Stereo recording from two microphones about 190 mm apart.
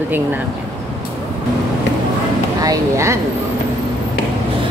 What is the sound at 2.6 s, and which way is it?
Speech, 15° right (ahead or behind).